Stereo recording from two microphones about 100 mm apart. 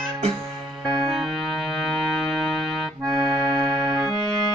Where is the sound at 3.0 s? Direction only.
35° right (ahead or behind).